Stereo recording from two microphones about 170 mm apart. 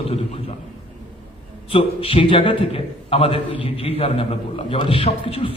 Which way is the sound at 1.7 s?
35° left (ahead or behind).